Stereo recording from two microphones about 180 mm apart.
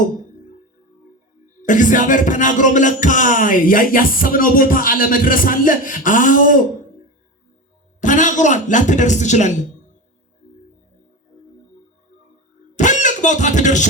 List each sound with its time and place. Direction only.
1.6 s music: 45° left (ahead or behind)
8.0 s music: 45° left (ahead or behind)
12.7 s a sound: 45° left (ahead or behind)